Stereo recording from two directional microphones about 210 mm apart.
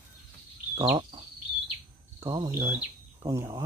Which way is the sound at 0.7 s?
20° right (ahead or behind).